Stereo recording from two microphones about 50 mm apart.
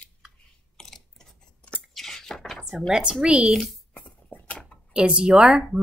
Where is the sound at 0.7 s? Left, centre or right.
Centre.